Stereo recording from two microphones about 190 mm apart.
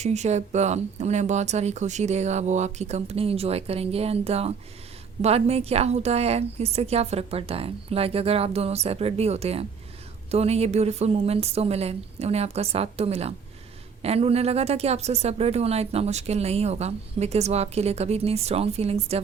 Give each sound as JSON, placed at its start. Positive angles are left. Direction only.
{"t": 0.0, "sound": "a woman's voice", "side_deg": -35}